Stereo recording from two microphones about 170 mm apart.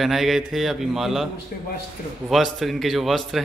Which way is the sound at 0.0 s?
Centre (ahead or behind).